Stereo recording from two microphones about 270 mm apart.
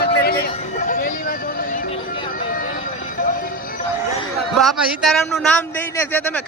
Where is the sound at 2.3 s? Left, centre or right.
Left.